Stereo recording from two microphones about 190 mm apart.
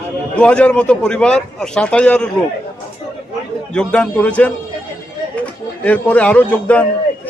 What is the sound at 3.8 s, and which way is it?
Speech, 5° left (ahead or behind).